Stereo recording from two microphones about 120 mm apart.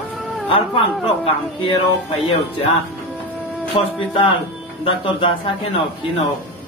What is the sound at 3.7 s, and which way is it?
Speech, 45° left (ahead or behind).